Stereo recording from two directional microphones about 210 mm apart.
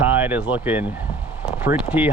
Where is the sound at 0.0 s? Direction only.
10° right (ahead or behind).